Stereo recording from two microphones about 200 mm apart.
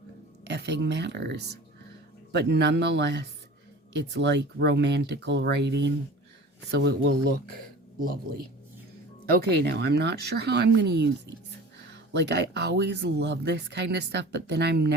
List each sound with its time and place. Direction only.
0.4 s speech: 60° right (ahead or behind)
9.4 s speech: 55° right (ahead or behind)
12.2 s speech: 60° right (ahead or behind)